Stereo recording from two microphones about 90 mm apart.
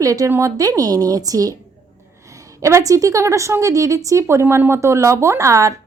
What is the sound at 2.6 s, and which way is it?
Speech, 35° right (ahead or behind).